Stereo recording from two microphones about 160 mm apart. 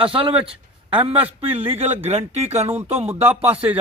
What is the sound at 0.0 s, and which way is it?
Speech, 35° right (ahead or behind).